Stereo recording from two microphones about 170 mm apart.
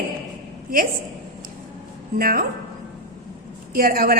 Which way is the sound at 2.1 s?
60° right (ahead or behind).